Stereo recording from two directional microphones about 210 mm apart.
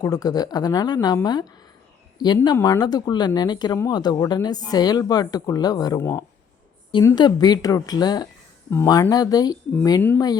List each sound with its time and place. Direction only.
0.0 s speech: 20° left (ahead or behind)